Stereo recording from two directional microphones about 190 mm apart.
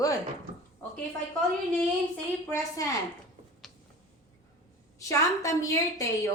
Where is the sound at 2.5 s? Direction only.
15° left (ahead or behind).